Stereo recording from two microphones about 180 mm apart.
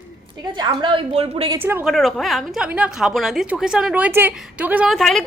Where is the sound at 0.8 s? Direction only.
30° right (ahead or behind).